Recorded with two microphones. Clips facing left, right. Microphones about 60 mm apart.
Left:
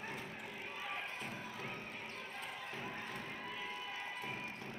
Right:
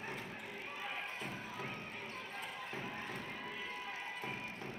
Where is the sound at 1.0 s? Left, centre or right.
Right.